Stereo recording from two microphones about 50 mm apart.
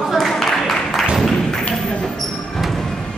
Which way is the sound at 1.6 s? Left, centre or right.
Centre.